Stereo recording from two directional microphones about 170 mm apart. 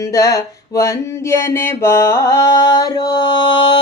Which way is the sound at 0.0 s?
20° left (ahead or behind).